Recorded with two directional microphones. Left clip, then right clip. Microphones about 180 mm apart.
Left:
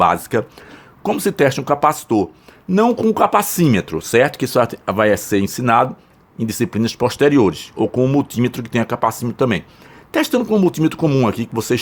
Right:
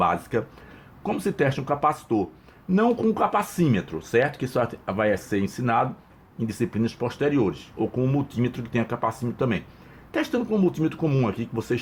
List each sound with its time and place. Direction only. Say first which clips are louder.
0.0 s speech: left 8 dB; 40° left (ahead or behind)